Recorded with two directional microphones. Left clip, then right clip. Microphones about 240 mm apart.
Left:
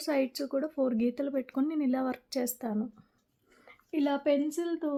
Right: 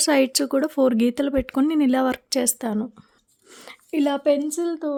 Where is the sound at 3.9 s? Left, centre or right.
Right.